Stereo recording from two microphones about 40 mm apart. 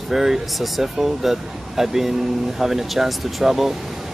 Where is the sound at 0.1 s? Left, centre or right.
Centre.